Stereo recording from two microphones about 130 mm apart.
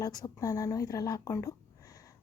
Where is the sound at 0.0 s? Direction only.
30° left (ahead or behind).